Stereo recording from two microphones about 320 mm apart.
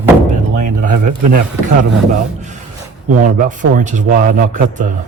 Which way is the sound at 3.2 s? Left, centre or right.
Right.